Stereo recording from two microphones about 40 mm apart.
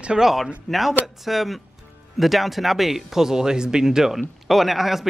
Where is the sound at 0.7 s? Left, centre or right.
Centre.